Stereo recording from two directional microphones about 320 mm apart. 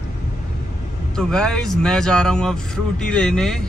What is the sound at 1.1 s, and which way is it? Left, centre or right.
A man's voice, centre.